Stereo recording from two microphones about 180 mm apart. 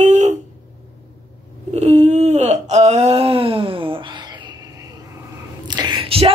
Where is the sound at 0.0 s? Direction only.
40° right (ahead or behind).